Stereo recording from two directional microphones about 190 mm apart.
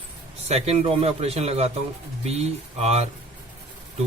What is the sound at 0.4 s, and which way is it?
Speech, 35° right (ahead or behind).